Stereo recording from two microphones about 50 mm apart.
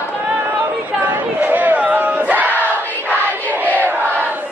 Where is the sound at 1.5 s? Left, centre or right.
Right.